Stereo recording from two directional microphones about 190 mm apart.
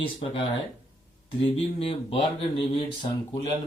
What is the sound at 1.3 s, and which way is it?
Speech, 30° left (ahead or behind).